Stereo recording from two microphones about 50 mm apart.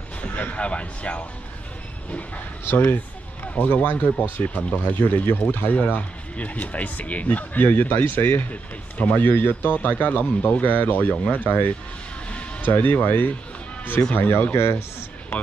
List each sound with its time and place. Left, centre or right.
0.6 s speech: left
2.6 s speech: left
4.9 s speech: left
8.9 s speech: left
9.2 s speech: left